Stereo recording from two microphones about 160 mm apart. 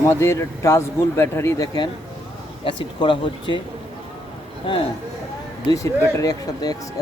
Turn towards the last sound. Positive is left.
turn(degrees=25)  # may be behind; listen again after turning